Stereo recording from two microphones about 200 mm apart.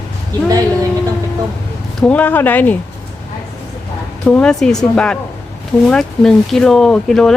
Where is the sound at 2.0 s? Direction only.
5° left (ahead or behind).